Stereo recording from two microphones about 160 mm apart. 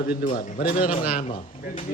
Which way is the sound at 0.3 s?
60° left (ahead or behind).